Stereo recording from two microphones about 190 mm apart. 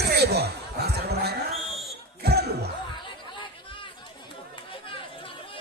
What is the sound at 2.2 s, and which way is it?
Basketball bounce, 55° right (ahead or behind).